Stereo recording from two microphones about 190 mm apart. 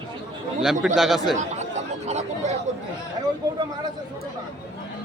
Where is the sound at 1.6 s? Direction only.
35° right (ahead or behind).